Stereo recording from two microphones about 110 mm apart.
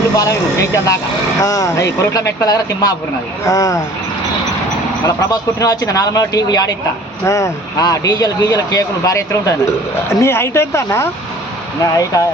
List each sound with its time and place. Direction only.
0.2 s speech: 30° left (ahead or behind)
5.0 s speech: 30° left (ahead or behind)